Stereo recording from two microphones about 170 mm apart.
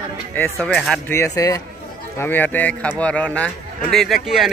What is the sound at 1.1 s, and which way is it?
A man's voice, 15° left (ahead or behind).